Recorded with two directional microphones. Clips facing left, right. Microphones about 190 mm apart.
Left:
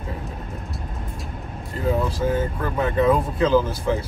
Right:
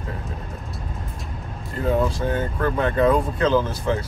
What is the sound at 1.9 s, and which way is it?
Speech, 5° left (ahead or behind).